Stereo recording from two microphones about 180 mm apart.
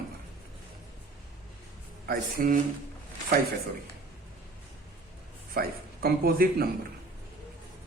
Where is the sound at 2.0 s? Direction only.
55° right (ahead or behind).